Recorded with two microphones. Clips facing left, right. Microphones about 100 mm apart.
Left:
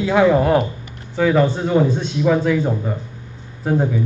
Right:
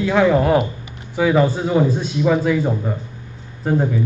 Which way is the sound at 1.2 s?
10° right (ahead or behind).